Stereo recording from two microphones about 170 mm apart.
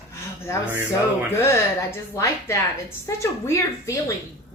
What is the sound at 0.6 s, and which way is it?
Speech, 10° right (ahead or behind).